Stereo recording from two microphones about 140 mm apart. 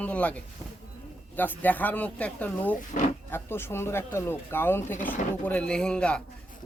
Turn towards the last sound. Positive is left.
turn(degrees=5)  # may be behind; listen again after turning